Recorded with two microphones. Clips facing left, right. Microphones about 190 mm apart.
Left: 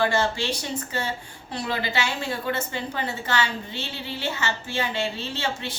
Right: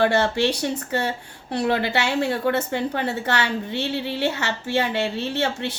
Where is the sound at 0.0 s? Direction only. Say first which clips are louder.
Right 4 dB; 65° right (ahead or behind).